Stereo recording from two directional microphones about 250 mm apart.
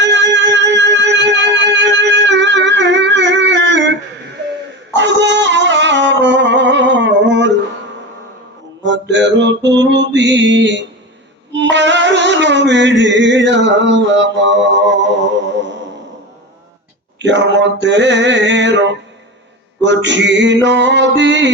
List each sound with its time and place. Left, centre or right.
0.0 s music: right
4.9 s music: right
8.8 s music: right
9.6 s a sound: right
11.5 s music: right
17.2 s a sound: right